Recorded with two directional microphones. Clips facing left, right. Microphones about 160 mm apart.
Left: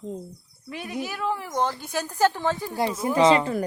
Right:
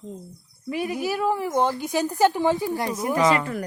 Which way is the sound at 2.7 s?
25° left (ahead or behind).